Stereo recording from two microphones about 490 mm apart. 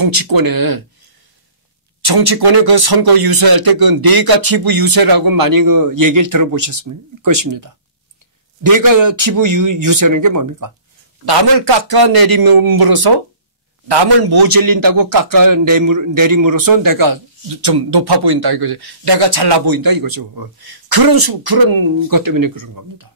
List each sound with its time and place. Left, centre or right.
0.0 s a man's voice: right
2.0 s a man's voice: right
11.2 s a man's voice: right